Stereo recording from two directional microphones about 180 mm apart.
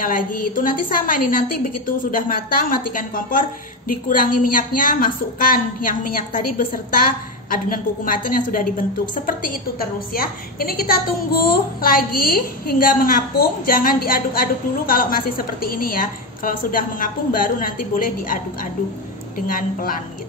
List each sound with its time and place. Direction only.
0.0 s a woman's voice: 50° left (ahead or behind)